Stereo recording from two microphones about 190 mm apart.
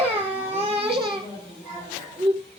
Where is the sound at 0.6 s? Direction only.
30° right (ahead or behind).